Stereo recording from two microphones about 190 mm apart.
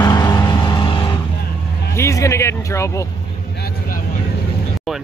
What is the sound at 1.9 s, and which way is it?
Vehicle, 15° left (ahead or behind).